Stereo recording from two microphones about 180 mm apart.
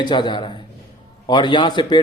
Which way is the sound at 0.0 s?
25° left (ahead or behind).